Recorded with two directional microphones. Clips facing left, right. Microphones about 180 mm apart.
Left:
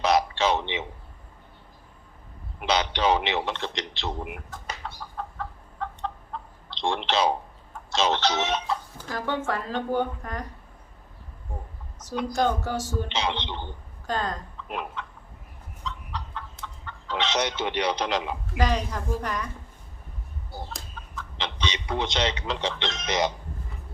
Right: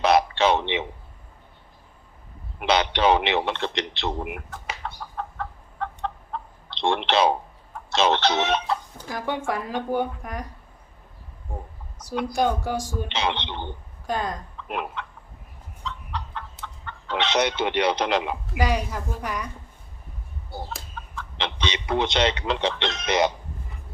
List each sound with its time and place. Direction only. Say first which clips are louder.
0.0 s a sound: right 3 dB; 60° right (ahead or behind)
2.6 s a man's voice: right 3 dB; 65° right (ahead or behind)
5.1 s chicken: right 1 dB; 60° right (ahead or behind)
9.0 s speech: right 1 dB; 15° right (ahead or behind)
12.3 s speech: right 1 dB; 10° right (ahead or behind)
13.1 s a man's voice: right 2 dB; 60° right (ahead or behind)
14.1 s speech: right 1 dB; 10° right (ahead or behind)
14.7 s chicken: right 3 dB; 65° right (ahead or behind)
16.8 s speech: right 2 dB; 60° right (ahead or behind)
18.5 s speech: right 1 dB; 10° right (ahead or behind)
21.2 s speech: right 2 dB; 60° right (ahead or behind)